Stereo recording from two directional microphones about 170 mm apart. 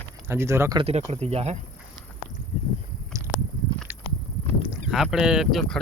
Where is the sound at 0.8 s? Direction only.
40° right (ahead or behind).